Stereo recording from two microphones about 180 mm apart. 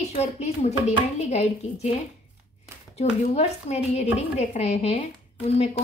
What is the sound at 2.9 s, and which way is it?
A woman's voice, 35° left (ahead or behind).